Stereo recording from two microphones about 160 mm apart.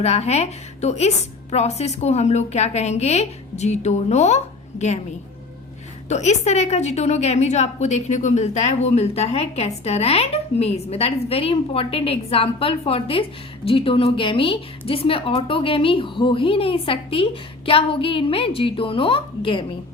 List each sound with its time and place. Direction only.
0.0 s a woman's voice: 45° left (ahead or behind)
6.1 s a woman's voice: 45° left (ahead or behind)